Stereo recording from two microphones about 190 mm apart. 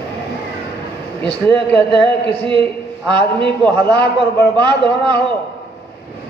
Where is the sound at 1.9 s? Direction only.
25° right (ahead or behind).